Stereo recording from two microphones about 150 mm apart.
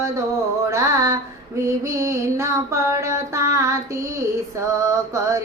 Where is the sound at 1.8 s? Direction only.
20° right (ahead or behind).